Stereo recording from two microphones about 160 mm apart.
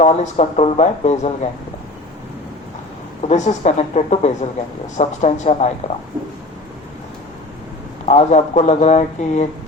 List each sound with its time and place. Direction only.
0.0 s speech: 45° left (ahead or behind)
3.2 s speech: 45° left (ahead or behind)
8.0 s speech: 45° left (ahead or behind)